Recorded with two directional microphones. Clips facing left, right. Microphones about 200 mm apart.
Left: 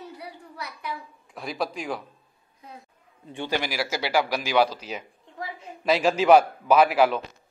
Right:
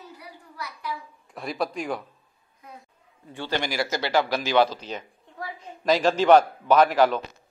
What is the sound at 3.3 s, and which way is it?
Speech, 20° left (ahead or behind).